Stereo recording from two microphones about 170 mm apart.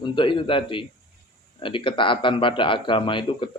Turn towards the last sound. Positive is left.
turn(degrees=30)  # may be behind; listen again after turning